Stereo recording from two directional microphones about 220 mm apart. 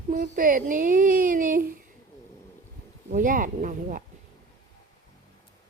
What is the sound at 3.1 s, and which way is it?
Speech, 35° right (ahead or behind).